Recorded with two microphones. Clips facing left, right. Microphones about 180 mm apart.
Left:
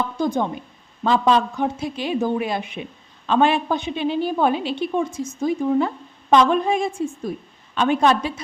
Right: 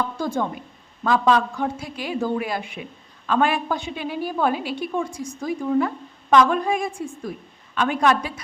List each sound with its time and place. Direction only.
0.2 s a woman's voice: 20° left (ahead or behind)